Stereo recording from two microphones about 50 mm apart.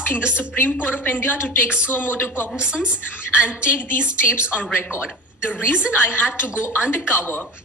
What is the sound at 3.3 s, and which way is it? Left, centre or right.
A woman's voice, left.